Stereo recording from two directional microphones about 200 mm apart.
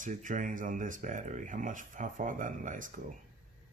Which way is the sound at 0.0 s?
40° right (ahead or behind).